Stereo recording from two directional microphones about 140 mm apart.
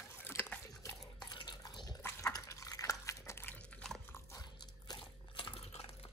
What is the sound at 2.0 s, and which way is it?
Dog, 25° left (ahead or behind).